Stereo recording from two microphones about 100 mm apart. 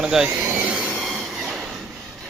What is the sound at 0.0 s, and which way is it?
Speech, 5° right (ahead or behind).